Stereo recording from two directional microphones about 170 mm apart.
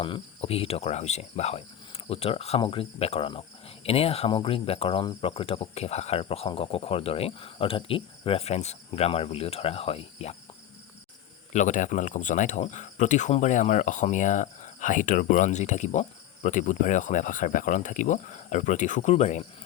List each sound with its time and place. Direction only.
0.0 s cricket: 35° left (ahead or behind)
11.5 s speech: 45° left (ahead or behind)